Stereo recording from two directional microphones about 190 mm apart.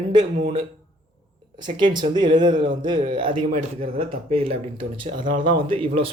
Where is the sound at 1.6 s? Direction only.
25° right (ahead or behind).